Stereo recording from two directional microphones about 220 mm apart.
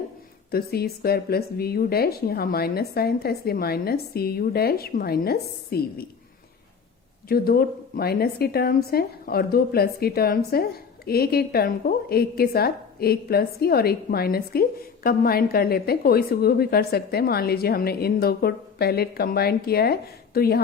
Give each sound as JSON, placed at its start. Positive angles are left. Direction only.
{"t": 0.5, "sound": "a woman's voice", "side_deg": 45}
{"t": 7.3, "sound": "a woman's voice", "side_deg": 45}